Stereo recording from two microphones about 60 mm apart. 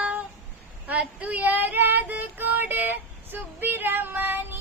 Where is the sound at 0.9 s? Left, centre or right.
Right.